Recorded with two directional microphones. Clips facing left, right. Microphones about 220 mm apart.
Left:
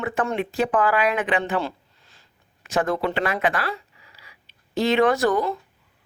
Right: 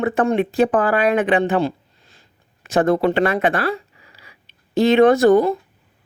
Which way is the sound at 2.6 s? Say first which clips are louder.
Right 7 dB; 30° right (ahead or behind).